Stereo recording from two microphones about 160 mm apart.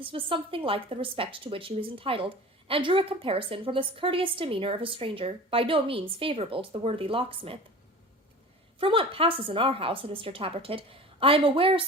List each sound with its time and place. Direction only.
0.0 s a woman's voice: 35° right (ahead or behind)
8.8 s a woman's voice: 35° right (ahead or behind)